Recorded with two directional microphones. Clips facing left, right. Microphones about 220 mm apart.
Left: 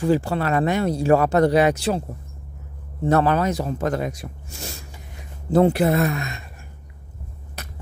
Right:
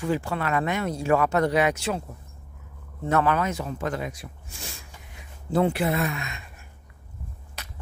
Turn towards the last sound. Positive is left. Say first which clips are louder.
# left 6 dB
turn(degrees=40)  # may be behind; listen again after turning